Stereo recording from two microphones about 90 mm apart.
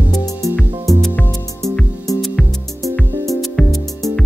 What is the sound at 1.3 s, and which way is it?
Music, 5° left (ahead or behind).